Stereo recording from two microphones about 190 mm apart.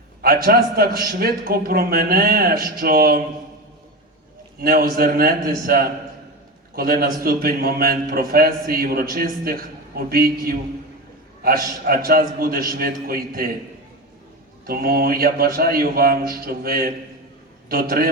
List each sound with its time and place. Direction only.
0.2 s a man's voice: 50° right (ahead or behind)
4.6 s a man's voice: 50° right (ahead or behind)
14.7 s a man's voice: 55° right (ahead or behind)